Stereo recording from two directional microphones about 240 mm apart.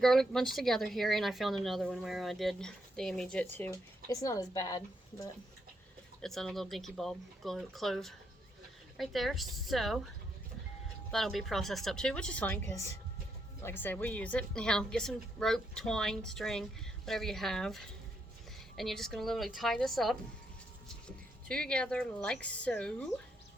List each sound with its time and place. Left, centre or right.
0.0 s speech: centre
6.2 s speech: centre
11.1 s speech: centre
21.4 s speech: centre